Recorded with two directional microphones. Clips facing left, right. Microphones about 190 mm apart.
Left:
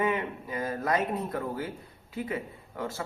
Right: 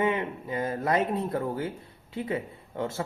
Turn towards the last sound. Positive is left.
turn(degrees=-25)  # may be behind; listen again after turning